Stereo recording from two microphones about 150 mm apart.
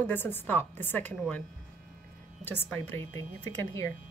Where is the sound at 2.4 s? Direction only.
15° left (ahead or behind).